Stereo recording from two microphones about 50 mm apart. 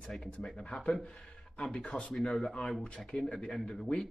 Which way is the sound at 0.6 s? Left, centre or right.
Centre.